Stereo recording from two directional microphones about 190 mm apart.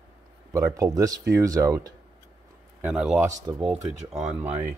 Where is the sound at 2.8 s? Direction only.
5° right (ahead or behind).